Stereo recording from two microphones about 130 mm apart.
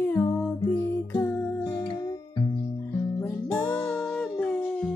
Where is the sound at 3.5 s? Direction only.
15° left (ahead or behind).